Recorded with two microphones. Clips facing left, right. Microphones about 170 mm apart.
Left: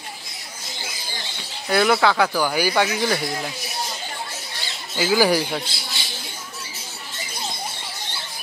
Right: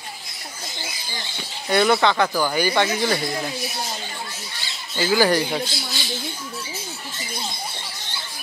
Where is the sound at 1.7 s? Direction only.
5° left (ahead or behind).